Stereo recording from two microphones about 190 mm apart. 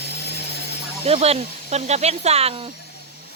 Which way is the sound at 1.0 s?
30° right (ahead or behind).